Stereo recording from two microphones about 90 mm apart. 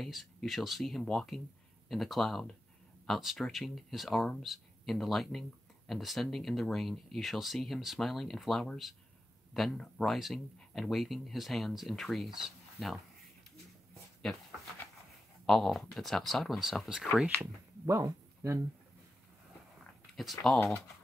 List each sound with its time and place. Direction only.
0.0 s speech: centre (ahead or behind)
15.4 s speech: centre (ahead or behind)
17.4 s speech: 35° right (ahead or behind)
20.2 s speech: centre (ahead or behind)